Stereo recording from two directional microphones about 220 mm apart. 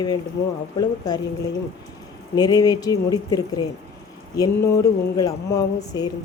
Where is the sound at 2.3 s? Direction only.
15° left (ahead or behind).